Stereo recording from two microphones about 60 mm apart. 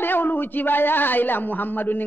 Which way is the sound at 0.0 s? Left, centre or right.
Left.